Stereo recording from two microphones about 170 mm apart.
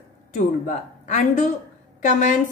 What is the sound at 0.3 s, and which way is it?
A woman's voice, 45° left (ahead or behind).